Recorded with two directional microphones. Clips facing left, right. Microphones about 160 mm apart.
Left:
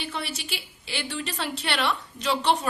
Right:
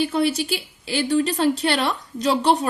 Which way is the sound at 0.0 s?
40° right (ahead or behind).